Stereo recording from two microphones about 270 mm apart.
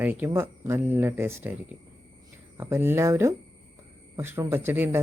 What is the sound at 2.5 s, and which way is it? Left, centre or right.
Speech, centre.